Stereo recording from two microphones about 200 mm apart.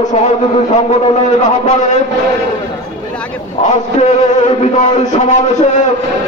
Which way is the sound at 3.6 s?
30° left (ahead or behind).